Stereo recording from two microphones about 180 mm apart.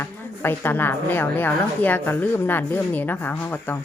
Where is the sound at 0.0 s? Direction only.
10° left (ahead or behind).